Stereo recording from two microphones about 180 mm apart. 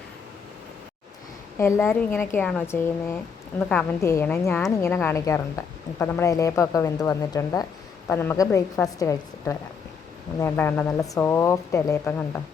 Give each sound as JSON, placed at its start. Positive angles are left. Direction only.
{"t": 1.5, "sound": "a woman's voice", "side_deg": 15}